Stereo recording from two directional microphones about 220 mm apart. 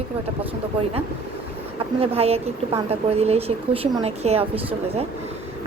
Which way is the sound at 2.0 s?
25° right (ahead or behind).